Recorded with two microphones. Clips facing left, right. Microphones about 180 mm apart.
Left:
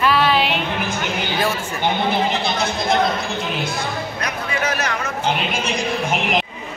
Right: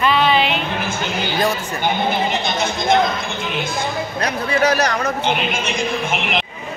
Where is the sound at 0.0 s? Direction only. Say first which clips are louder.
Right 1 dB; 5° left (ahead or behind).